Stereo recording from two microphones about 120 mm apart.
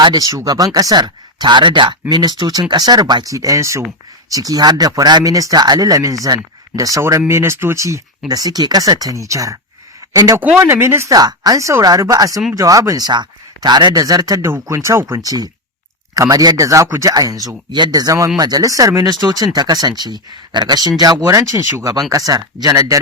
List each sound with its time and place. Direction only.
0.0 s speech: 30° right (ahead or behind)